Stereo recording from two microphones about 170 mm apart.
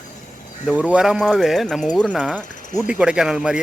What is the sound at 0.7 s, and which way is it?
Speech, 10° right (ahead or behind).